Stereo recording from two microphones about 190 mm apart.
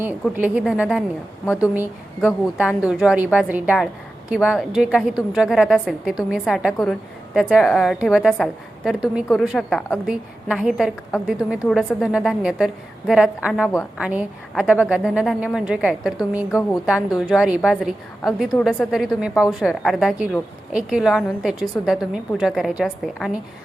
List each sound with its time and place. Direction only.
0.0 s a woman's voice: 10° right (ahead or behind)
16.5 s a woman's voice: 15° left (ahead or behind)
16.8 s a woman's voice: 5° right (ahead or behind)